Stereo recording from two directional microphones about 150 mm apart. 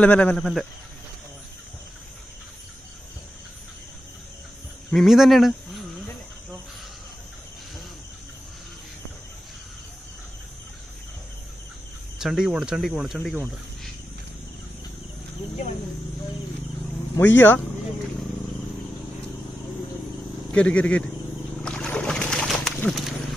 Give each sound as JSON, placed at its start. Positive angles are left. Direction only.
{"t": 0.0, "sound": "speech", "side_deg": 10}
{"t": 4.9, "sound": "speech", "side_deg": 0}
{"t": 12.2, "sound": "speech", "side_deg": -5}
{"t": 17.2, "sound": "speech", "side_deg": 15}
{"t": 20.5, "sound": "speech", "side_deg": 5}
{"t": 21.6, "sound": "wild animals", "side_deg": 5}
{"t": 22.8, "sound": "speech", "side_deg": 0}